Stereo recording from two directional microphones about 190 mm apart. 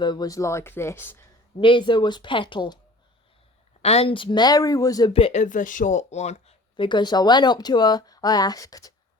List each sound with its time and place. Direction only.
0.0 s speech: 20° left (ahead or behind)
1.5 s speech: 25° left (ahead or behind)
3.8 s speech: 35° left (ahead or behind); by 8.9 s 20° left (ahead or behind)